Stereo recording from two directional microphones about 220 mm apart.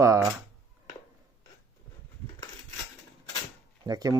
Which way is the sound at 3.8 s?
15° right (ahead or behind).